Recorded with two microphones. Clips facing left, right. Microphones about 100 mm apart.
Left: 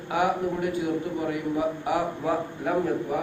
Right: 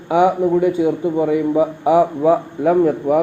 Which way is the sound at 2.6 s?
80° right.